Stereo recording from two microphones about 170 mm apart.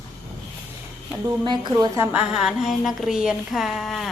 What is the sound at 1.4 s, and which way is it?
Speech, 25° right (ahead or behind).